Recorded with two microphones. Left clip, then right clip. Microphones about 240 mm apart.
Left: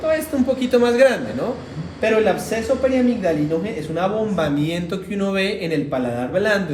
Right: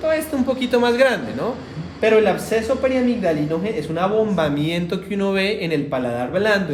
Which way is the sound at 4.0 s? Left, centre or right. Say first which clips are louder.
Right 1 dB; right.